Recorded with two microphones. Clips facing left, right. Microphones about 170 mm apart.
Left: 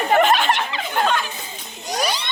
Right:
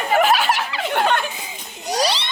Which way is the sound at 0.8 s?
65° right (ahead or behind).